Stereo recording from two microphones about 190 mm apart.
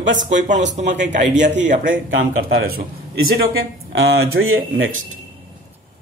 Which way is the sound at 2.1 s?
90° right.